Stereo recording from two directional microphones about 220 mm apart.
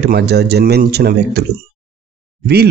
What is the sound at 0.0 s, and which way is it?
Speech, 45° right (ahead or behind).